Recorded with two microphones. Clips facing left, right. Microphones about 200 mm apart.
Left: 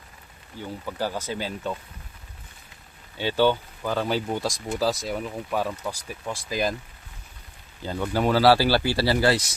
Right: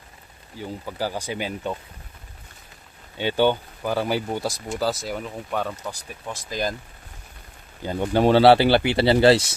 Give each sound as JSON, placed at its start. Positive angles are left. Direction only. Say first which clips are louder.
{"t": 0.6, "sound": "speech", "louder": "right 1 dB", "side_deg": -10}
{"t": 3.2, "sound": "speech", "louder": "right 1 dB", "side_deg": -15}
{"t": 7.8, "sound": "speech", "louder": "right 4 dB", "side_deg": -20}